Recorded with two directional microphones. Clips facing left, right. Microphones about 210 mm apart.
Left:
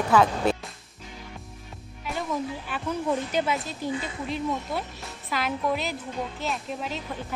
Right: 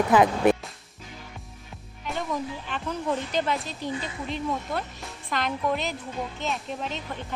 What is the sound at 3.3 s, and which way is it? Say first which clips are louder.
Speech: left 1 dB; 5° left (ahead or behind).